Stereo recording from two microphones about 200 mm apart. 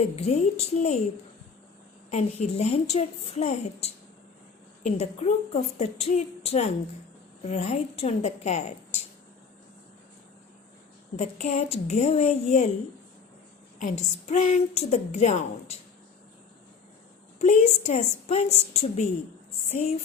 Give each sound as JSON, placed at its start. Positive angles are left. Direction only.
{"t": 0.2, "sound": "a woman's voice", "side_deg": 35}
{"t": 2.0, "sound": "a woman's voice", "side_deg": 35}
{"t": 11.2, "sound": "a woman's voice", "side_deg": 35}
{"t": 13.7, "sound": "a woman's voice", "side_deg": 40}
{"t": 17.4, "sound": "a woman's voice", "side_deg": 35}